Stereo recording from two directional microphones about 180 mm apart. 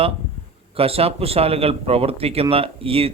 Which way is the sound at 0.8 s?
35° right (ahead or behind).